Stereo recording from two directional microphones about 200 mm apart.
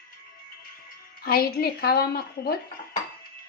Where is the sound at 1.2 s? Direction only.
50° left (ahead or behind).